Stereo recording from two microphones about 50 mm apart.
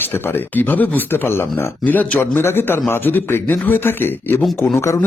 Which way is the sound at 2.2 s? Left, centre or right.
Left.